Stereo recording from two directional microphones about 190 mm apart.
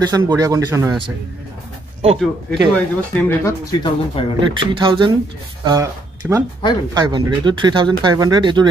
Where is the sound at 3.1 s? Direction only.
15° left (ahead or behind).